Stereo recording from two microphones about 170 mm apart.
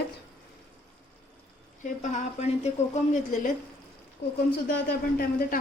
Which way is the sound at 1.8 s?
45° left (ahead or behind).